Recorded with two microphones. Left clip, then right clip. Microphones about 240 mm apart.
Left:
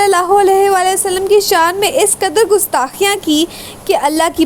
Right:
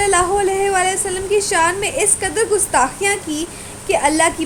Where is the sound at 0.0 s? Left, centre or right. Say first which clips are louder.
Left 6 dB; left.